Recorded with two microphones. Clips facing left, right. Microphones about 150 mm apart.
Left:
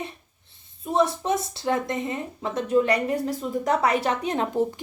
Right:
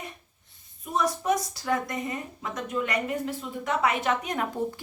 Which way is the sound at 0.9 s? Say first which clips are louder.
Left 3 dB; 25° left (ahead or behind).